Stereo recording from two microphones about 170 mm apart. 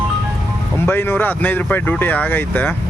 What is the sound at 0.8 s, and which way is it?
Speech, 15° left (ahead or behind).